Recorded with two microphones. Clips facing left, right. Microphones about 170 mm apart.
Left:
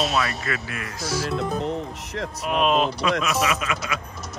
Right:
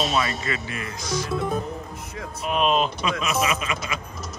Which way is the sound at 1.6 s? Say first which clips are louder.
Left 5 dB; 80° left.